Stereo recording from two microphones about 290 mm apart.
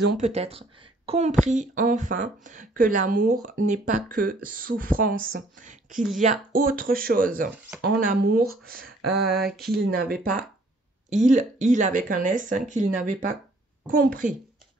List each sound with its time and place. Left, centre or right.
0.0 s speech: right
9.1 s a sound: centre
9.7 s speech: right